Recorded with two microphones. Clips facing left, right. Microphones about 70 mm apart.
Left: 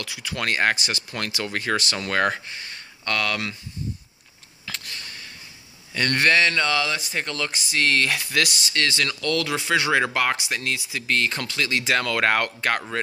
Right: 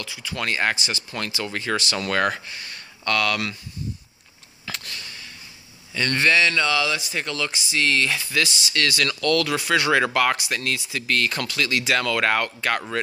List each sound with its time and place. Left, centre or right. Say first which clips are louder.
0.0 s speech: even; left
0.4 s speech: left 1 dB; left
2.0 s speech: even; left
4.9 s a sound: even; left
5.9 s speech: even; left
8.7 s speech: right 1 dB; left